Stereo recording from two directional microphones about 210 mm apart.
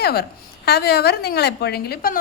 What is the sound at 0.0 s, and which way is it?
A woman's voice, 50° left (ahead or behind).